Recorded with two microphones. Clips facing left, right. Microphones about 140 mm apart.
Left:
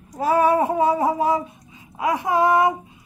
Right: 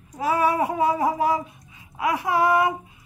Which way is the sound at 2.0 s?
25° left (ahead or behind).